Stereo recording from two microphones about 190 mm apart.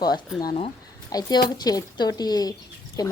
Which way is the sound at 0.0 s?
20° left (ahead or behind).